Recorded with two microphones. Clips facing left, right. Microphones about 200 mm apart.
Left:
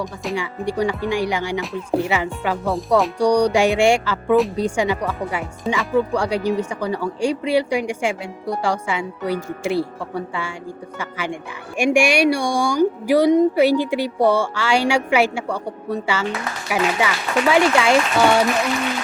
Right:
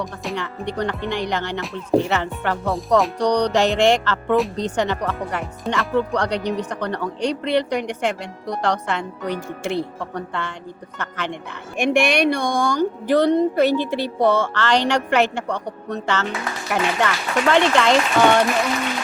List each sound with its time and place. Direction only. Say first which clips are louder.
0.0 s speech: left 2 dB; 5° left (ahead or behind)